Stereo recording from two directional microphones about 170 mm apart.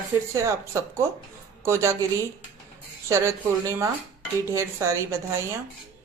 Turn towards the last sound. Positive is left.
turn(degrees=-15)  # may be behind; listen again after turning